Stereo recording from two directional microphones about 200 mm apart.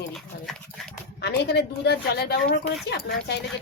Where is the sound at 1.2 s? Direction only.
55° left (ahead or behind).